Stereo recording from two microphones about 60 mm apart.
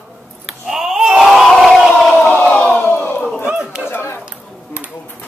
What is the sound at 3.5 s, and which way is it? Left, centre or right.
Chatter, centre.